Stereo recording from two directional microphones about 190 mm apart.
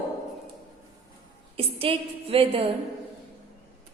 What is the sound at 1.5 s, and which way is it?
A woman's voice, 30° right (ahead or behind).